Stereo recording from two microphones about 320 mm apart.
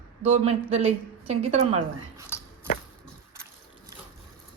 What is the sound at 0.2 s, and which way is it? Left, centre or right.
A woman's voice, centre.